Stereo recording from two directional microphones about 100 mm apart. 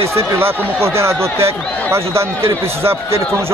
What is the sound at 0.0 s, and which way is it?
Speech, 25° right (ahead or behind).